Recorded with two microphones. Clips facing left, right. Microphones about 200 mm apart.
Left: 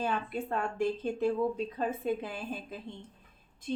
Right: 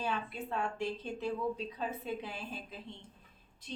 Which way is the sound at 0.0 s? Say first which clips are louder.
Left 4 dB; 50° left (ahead or behind).